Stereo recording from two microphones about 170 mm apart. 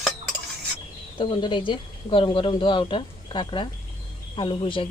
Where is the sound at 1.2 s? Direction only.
30° left (ahead or behind).